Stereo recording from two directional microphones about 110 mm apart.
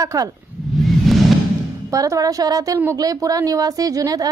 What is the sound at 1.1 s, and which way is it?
Music, centre (ahead or behind).